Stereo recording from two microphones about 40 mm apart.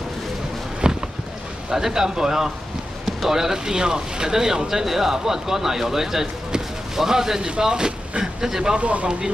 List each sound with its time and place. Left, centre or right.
0.8 s a sound: right
1.7 s speech: centre
8.7 s speech: right